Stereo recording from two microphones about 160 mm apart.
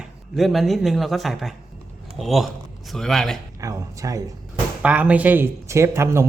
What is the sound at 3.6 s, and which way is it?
Speech, 20° right (ahead or behind).